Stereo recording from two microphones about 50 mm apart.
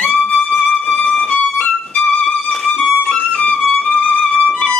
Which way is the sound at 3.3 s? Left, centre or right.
Left.